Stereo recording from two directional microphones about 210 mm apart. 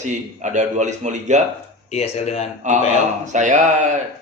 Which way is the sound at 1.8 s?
30° left (ahead or behind).